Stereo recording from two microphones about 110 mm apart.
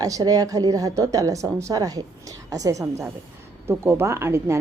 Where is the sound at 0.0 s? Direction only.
35° right (ahead or behind).